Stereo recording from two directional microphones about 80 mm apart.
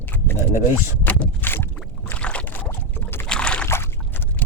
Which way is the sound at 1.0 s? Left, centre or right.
Left.